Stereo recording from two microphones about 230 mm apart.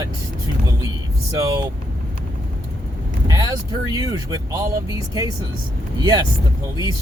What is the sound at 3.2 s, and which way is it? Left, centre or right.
Speech, centre.